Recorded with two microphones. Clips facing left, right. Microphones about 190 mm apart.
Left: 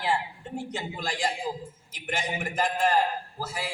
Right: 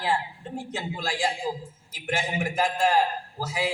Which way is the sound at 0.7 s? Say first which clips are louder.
Right 5 dB; 5° right (ahead or behind).